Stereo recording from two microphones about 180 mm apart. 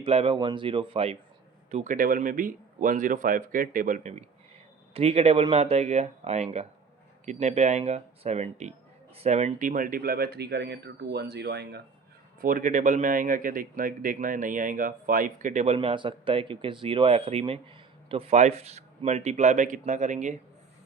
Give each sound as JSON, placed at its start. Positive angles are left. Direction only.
{"t": 0.0, "sound": "speech", "side_deg": -35}
{"t": 1.7, "sound": "speech", "side_deg": -45}
{"t": 4.9, "sound": "a man's voice", "side_deg": -35}
{"t": 12.4, "sound": "a man's voice", "side_deg": -50}